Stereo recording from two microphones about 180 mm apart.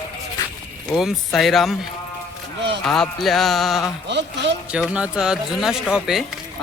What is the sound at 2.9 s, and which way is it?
Speech, centre (ahead or behind).